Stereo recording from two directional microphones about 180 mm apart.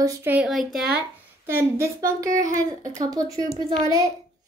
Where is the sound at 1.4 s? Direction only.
15° right (ahead or behind).